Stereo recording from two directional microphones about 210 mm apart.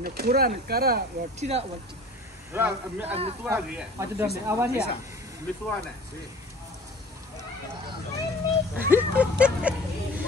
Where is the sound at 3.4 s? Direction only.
10° right (ahead or behind).